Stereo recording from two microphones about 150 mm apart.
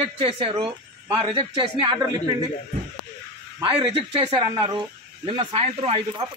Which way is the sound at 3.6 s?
35° right (ahead or behind).